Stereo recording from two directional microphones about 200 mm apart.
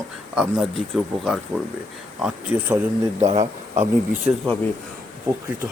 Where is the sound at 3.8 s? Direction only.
5° right (ahead or behind).